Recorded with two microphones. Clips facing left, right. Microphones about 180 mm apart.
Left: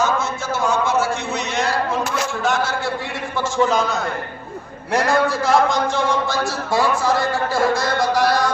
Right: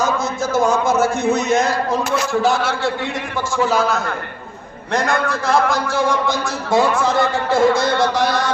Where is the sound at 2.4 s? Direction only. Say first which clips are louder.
Right 3 dB; 35° right (ahead or behind).